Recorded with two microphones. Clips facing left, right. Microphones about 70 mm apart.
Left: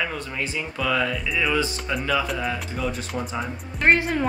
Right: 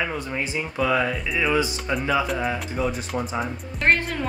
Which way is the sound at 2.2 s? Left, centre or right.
Centre.